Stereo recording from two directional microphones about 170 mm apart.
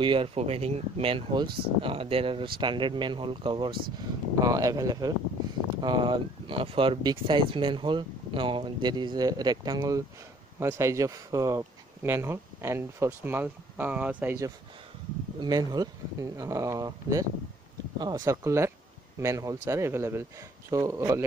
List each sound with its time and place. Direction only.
0.0 s speech: 30° right (ahead or behind)
4.4 s speech: 20° right (ahead or behind)
15.4 s speech: 25° right (ahead or behind)